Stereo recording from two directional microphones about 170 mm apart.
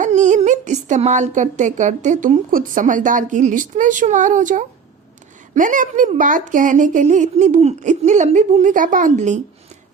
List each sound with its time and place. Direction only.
0.0 s a woman's voice: 45° right (ahead or behind)